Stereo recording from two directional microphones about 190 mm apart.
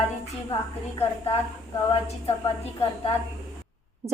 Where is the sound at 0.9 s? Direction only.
30° left (ahead or behind).